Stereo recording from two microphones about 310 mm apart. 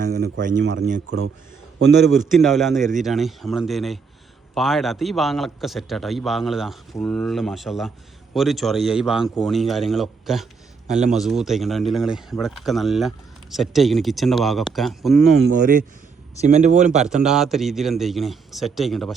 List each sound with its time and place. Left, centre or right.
0.0 s speech: right
2.3 s speech: centre
15.4 s speech: right
17.2 s speech: centre